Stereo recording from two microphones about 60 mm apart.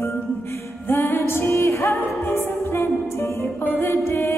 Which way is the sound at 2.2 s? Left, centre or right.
Left.